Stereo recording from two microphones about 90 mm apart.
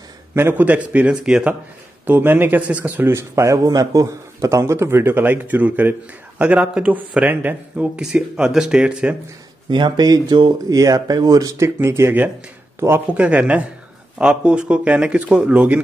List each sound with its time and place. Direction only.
0.3 s speech: 20° right (ahead or behind)
2.0 s speech: 20° right (ahead or behind)
3.1 s speech: 30° right (ahead or behind); by 9.1 s 10° right (ahead or behind)
9.7 s speech: 60° right (ahead or behind); by 12.3 s 25° right (ahead or behind)
13.1 s speech: 15° right (ahead or behind)